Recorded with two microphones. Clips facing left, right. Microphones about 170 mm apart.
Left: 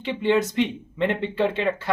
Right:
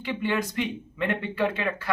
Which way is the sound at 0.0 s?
25° left (ahead or behind).